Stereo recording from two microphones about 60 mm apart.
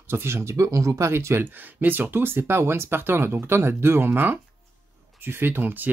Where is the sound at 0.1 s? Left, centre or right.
Right.